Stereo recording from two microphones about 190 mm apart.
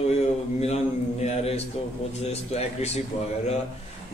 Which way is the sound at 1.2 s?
35° left (ahead or behind).